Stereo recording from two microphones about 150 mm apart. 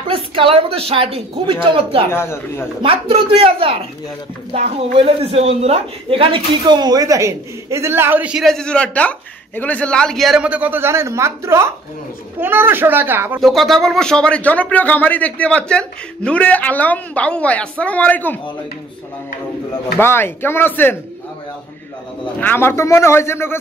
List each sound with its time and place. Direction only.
0.1 s speech: 35° right (ahead or behind)
2.0 s speech: 15° left (ahead or behind)
2.8 s a woman's voice: 35° right (ahead or behind); by 13.4 s 15° right (ahead or behind)
13.4 s speech: centre (ahead or behind)
20.0 s speech: 15° left (ahead or behind)
22.4 s speech: 15° left (ahead or behind)